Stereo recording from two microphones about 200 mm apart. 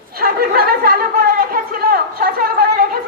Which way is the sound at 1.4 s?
45° right (ahead or behind).